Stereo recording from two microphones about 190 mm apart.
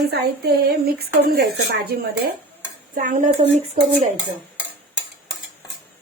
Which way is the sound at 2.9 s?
45° right (ahead or behind).